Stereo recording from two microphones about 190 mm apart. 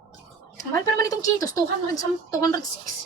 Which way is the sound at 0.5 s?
20° left (ahead or behind).